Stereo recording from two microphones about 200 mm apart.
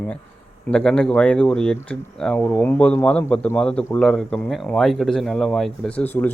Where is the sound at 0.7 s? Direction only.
5° left (ahead or behind).